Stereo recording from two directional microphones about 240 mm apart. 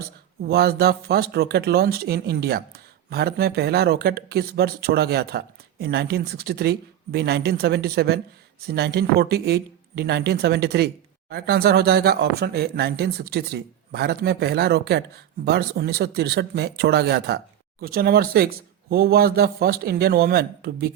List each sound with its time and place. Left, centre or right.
0.4 s speech: right